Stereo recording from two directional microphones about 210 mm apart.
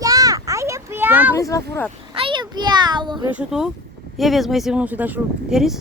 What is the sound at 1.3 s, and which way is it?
Speech, 15° left (ahead or behind).